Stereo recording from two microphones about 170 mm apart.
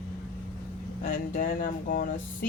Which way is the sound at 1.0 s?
55° left (ahead or behind).